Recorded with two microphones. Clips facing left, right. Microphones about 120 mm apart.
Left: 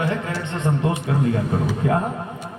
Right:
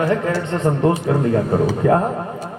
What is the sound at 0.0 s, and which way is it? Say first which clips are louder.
A man's voice: right 6 dB; 35° right (ahead or behind).